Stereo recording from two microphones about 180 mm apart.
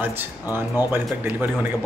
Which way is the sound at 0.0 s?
10° right (ahead or behind).